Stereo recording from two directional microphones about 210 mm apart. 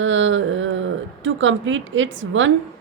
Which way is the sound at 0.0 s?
65° right (ahead or behind).